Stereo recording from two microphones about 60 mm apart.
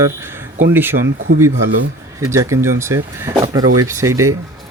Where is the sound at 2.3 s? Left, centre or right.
Right.